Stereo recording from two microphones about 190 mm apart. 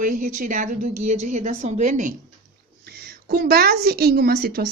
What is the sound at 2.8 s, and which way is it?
A woman's voice, 55° right (ahead or behind).